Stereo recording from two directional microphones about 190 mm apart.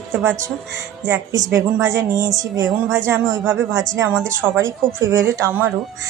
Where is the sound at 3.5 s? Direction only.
75° right (ahead or behind).